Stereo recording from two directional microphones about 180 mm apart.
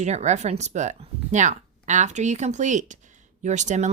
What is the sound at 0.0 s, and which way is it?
Speech, 40° right (ahead or behind).